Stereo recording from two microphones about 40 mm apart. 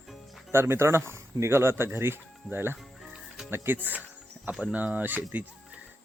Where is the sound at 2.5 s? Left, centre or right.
Right.